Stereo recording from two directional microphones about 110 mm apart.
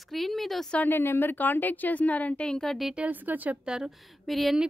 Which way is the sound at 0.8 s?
20° left (ahead or behind).